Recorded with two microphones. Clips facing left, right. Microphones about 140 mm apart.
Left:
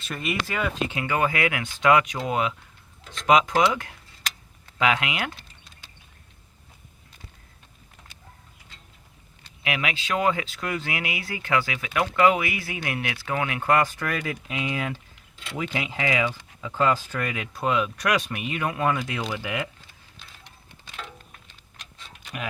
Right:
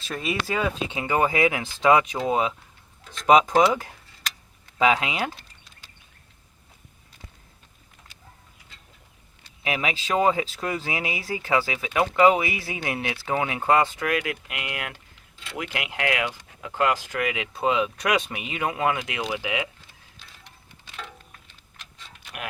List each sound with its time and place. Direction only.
0.1 s speech: centre (ahead or behind)
0.5 s speech: 25° right (ahead or behind)
4.9 s speech: 30° right (ahead or behind)
9.6 s speech: 35° right (ahead or behind)
14.0 s speech: 10° right (ahead or behind)